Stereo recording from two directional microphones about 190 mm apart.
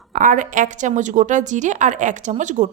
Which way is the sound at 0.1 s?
45° right (ahead or behind).